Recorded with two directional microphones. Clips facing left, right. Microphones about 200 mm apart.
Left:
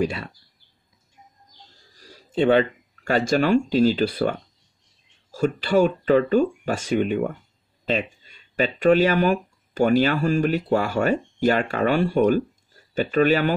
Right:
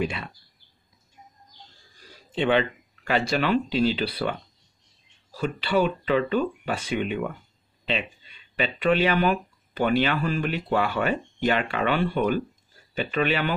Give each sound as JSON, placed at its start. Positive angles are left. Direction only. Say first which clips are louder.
{"t": 0.0, "sound": "speech", "louder": "left 4 dB", "side_deg": 40}
{"t": 2.0, "sound": "speech", "louder": "left 5 dB", "side_deg": 40}